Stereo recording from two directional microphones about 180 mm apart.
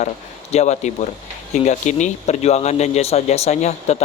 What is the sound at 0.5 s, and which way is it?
Speech, 40° left (ahead or behind).